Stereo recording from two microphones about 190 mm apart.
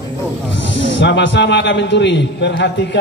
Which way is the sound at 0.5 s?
70° left (ahead or behind).